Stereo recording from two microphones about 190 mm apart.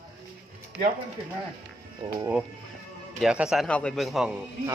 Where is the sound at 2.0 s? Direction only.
30° right (ahead or behind).